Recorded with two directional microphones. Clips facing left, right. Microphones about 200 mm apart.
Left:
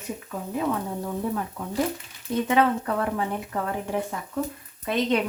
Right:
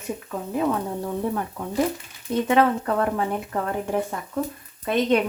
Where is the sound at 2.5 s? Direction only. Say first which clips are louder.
Right 2 dB; 50° right (ahead or behind).